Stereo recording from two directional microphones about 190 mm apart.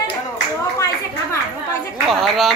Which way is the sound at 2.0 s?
Centre (ahead or behind).